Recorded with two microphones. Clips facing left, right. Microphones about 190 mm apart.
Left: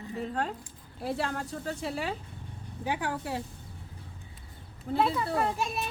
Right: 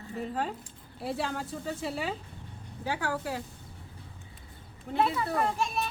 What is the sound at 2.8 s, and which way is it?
Speech, 20° left (ahead or behind).